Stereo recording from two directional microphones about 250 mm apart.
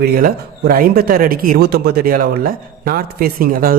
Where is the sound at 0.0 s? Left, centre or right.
Right.